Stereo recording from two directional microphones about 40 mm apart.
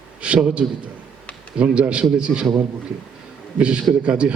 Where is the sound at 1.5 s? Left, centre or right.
Right.